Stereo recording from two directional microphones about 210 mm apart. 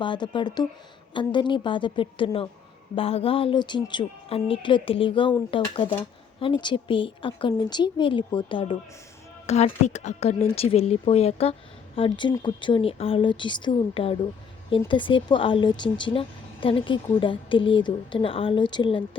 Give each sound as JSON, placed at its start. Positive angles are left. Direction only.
{"t": 0.0, "sound": "speech", "side_deg": 20}